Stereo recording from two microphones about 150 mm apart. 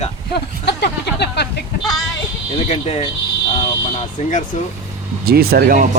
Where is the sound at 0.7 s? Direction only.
90° left.